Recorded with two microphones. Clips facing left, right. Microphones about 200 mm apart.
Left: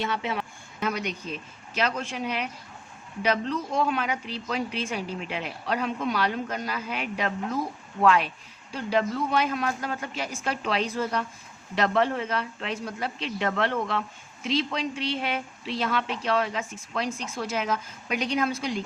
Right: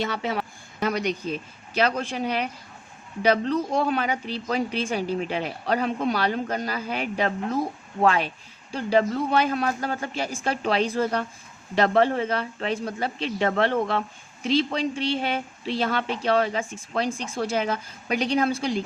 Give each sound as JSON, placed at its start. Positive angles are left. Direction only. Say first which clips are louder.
{"t": 0.0, "sound": "speech", "louder": "right 2 dB", "side_deg": -40}